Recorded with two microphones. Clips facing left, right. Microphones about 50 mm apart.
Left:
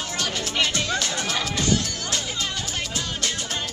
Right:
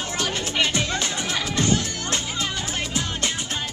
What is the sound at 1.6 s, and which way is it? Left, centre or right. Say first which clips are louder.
Music: right 4 dB; right.